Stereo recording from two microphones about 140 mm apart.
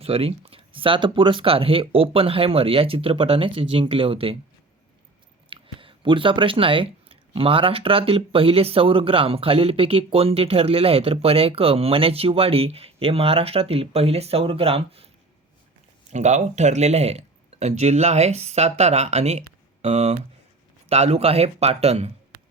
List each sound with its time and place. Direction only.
0.0 s speech: 45° right (ahead or behind)
5.5 s speech: 40° right (ahead or behind)
16.0 s speech: 55° right (ahead or behind)